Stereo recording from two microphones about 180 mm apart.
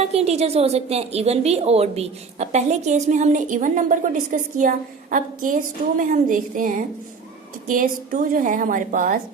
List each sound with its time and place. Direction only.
0.0 s a woman's voice: 35° right (ahead or behind)